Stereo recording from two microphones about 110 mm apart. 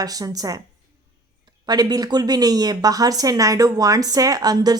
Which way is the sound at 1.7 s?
35° right (ahead or behind).